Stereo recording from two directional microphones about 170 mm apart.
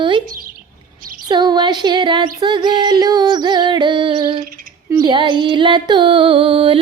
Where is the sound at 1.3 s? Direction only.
25° right (ahead or behind).